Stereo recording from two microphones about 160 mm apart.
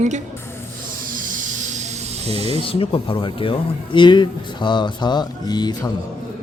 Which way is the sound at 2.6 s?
35° left (ahead or behind).